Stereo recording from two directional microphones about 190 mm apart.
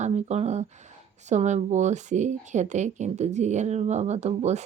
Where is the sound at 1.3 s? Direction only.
40° right (ahead or behind).